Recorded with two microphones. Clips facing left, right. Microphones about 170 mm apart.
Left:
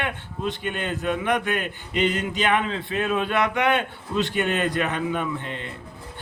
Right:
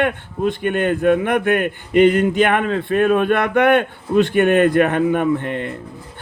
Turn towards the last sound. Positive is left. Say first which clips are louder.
# right 10 dB
turn(degrees=-55)  # may be behind; listen again after turning